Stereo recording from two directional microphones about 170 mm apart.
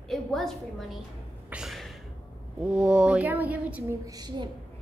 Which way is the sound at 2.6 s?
5° right (ahead or behind).